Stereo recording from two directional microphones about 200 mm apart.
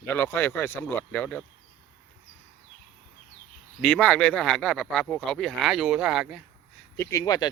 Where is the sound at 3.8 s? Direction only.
5° left (ahead or behind).